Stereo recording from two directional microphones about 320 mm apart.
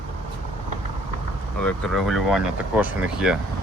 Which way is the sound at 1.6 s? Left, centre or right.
Centre.